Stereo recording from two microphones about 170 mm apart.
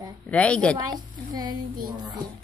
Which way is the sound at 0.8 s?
25° right (ahead or behind).